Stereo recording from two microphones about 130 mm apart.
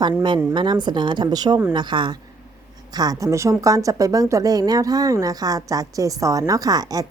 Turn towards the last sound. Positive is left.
turn(degrees=-30)  # may be behind; listen again after turning